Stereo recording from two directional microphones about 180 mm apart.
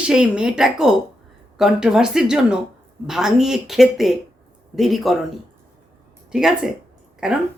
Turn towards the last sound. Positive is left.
turn(degrees=-5)  # may be behind; listen again after turning